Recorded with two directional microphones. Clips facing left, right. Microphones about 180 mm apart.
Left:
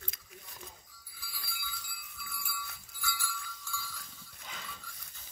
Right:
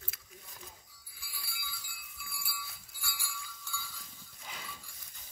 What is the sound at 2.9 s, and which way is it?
Jingle bell, 10° right (ahead or behind).